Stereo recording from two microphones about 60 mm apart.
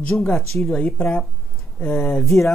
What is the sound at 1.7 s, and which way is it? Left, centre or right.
Speech, left.